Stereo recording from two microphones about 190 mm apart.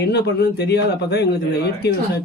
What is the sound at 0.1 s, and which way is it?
Speech, 60° left (ahead or behind).